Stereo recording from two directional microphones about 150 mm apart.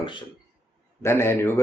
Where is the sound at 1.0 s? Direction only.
15° left (ahead or behind).